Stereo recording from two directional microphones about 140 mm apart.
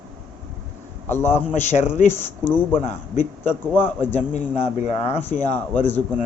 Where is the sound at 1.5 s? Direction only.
60° left (ahead or behind).